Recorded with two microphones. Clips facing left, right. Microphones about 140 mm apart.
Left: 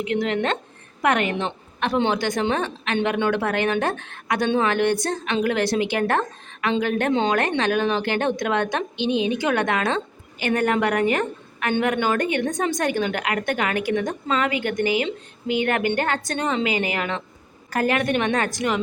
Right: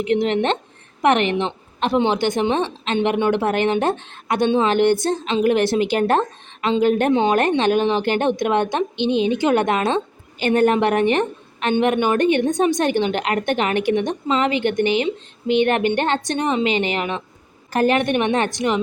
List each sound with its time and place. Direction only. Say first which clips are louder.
0.0 s a woman's voice: right 4 dB; 30° right (ahead or behind)
7.1 s a woman's voice: right 4 dB; 15° right (ahead or behind)
7.3 s a woman's voice: right 4 dB; 25° right (ahead or behind)